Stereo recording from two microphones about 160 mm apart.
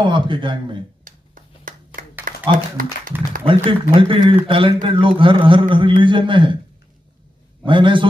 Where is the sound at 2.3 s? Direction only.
60° right (ahead or behind).